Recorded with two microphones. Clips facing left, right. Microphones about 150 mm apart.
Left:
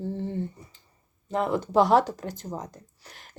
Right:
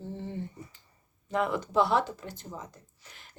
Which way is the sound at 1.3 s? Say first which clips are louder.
Left 3 dB; 35° left (ahead or behind).